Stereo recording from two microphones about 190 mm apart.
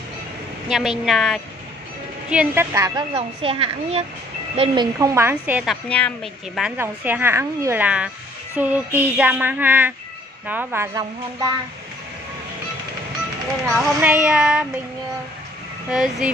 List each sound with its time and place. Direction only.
0.7 s speech: centre (ahead or behind)
2.2 s music: 10° right (ahead or behind)
3.2 s a child's voice: 30° right (ahead or behind)
4.9 s music: 15° right (ahead or behind)
5.9 s speech: 5° left (ahead or behind)
6.8 s music: 10° right (ahead or behind)
13.7 s speech: 5° right (ahead or behind)
15.9 s speech: 5° right (ahead or behind)